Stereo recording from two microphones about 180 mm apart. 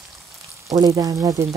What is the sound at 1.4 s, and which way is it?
Frying, 15° right (ahead or behind).